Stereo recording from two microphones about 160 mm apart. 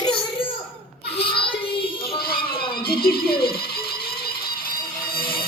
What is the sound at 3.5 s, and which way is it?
Music, 70° left (ahead or behind).